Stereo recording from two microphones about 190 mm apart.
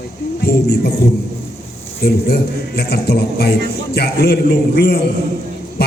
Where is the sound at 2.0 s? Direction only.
55° left (ahead or behind).